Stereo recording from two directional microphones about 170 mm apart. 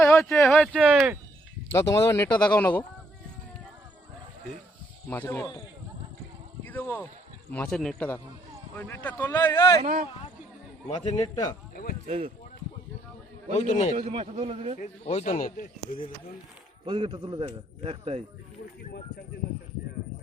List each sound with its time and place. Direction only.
0.0 s speech: 5° left (ahead or behind)
2.0 s speech: 15° left (ahead or behind)
5.0 s speech: 10° left (ahead or behind)
6.7 s speech: 10° left (ahead or behind)
9.8 s speech: 55° right (ahead or behind)
10.9 s a man's voice: 25° left (ahead or behind)
11.7 s a sound: 60° left (ahead or behind)
12.0 s speech: 50° right (ahead or behind)
13.5 s speech: 45° left (ahead or behind)
13.9 s a man's voice: 40° right (ahead or behind)
14.8 s speech: 40° left (ahead or behind)
16.8 s a man's voice: 30° right (ahead or behind)